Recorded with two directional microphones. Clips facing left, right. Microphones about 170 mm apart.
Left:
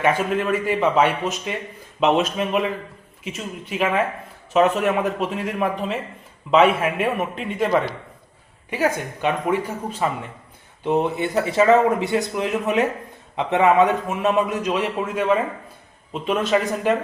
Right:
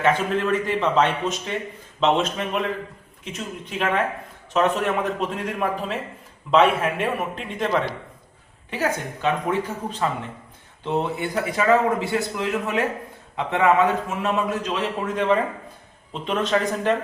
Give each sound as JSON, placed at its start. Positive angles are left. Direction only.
{"t": 0.0, "sound": "a man's voice", "side_deg": 10}